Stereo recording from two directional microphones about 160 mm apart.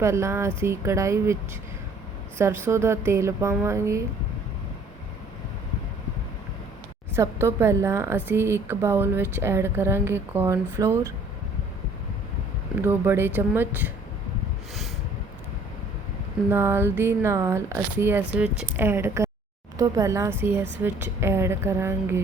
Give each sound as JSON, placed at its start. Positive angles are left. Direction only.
{"t": 0.0, "sound": "speech", "side_deg": -15}
{"t": 2.4, "sound": "speech", "side_deg": -15}
{"t": 7.1, "sound": "speech", "side_deg": -15}
{"t": 12.7, "sound": "speech", "side_deg": -15}
{"t": 16.5, "sound": "speech", "side_deg": -15}